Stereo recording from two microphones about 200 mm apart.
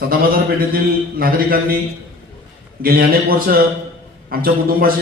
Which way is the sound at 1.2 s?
45° right (ahead or behind).